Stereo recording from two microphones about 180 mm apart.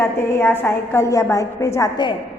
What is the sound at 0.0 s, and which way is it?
A woman's voice, 15° left (ahead or behind).